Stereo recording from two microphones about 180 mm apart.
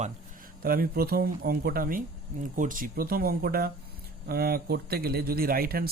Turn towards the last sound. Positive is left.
turn(degrees=-55)  # may be behind; listen again after turning